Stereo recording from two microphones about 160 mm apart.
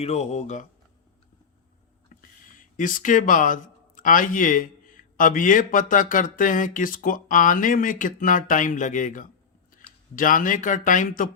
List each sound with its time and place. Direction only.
0.0 s speech: 40° left (ahead or behind)
2.7 s speech: 55° left (ahead or behind)